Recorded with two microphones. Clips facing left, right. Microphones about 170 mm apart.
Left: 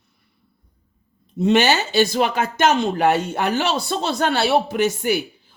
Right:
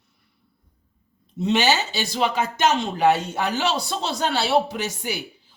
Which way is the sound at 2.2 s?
65° left (ahead or behind).